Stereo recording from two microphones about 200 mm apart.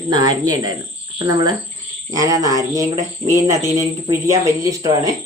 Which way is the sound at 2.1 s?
15° right (ahead or behind).